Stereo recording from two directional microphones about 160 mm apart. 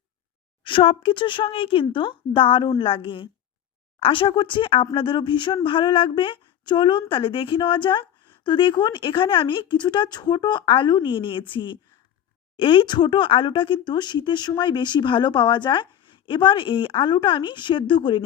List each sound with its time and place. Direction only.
0.6 s speech: 35° left (ahead or behind)